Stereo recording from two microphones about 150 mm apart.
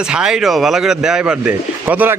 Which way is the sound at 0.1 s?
5° right (ahead or behind).